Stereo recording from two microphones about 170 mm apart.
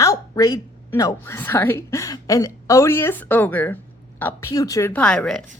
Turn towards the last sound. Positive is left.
turn(degrees=5)  # may be behind; listen again after turning